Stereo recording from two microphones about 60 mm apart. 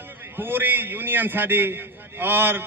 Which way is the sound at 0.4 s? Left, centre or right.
Right.